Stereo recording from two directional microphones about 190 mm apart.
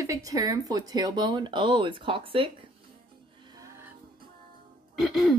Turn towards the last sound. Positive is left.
turn(degrees=0)  # may be behind; listen again after turning